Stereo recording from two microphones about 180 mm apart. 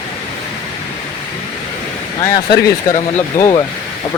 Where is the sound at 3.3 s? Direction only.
50° left (ahead or behind).